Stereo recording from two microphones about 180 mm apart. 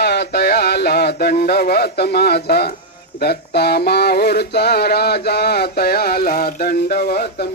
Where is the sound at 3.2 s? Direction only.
65° left (ahead or behind).